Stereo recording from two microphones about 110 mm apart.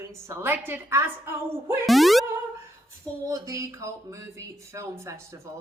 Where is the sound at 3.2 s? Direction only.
30° right (ahead or behind).